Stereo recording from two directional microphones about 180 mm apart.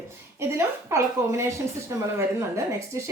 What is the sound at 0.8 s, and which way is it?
Speech, 15° right (ahead or behind).